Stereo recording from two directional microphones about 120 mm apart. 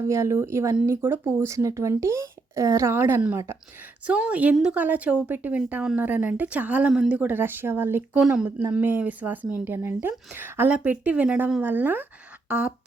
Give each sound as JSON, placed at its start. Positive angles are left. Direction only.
{"t": 0.1, "sound": "speech", "side_deg": -25}
{"t": 4.0, "sound": "a woman's voice", "side_deg": -10}
{"t": 8.2, "sound": "a woman's voice", "side_deg": -5}